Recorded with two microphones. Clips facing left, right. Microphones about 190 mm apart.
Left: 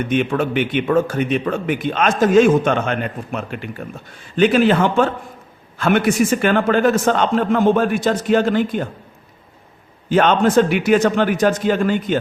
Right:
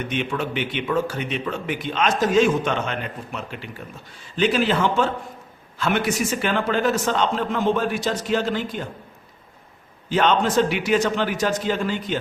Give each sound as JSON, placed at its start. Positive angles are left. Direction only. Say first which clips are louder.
{"t": 0.1, "sound": "a man's voice", "louder": "left 9 dB", "side_deg": 50}
{"t": 10.1, "sound": "speech", "louder": "left 5 dB", "side_deg": 50}